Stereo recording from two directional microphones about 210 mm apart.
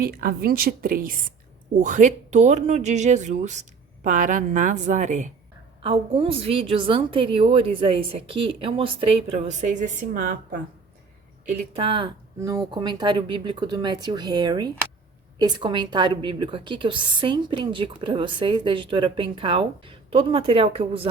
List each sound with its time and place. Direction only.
0.0 s speech: 45° right (ahead or behind)
5.8 s a woman's voice: 25° right (ahead or behind)
11.4 s a woman's voice: 25° right (ahead or behind)